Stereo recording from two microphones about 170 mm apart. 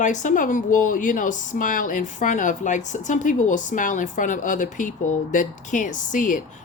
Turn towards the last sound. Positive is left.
turn(degrees=50)  # may be behind; listen again after turning